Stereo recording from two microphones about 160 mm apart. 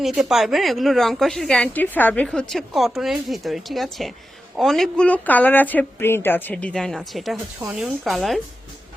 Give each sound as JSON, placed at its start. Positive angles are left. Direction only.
{"t": 0.0, "sound": "speech", "side_deg": 0}